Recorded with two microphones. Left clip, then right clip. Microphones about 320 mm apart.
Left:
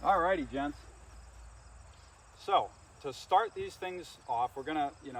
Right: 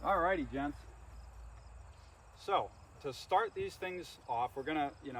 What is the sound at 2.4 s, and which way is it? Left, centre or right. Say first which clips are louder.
Speech: left 5 dB; centre.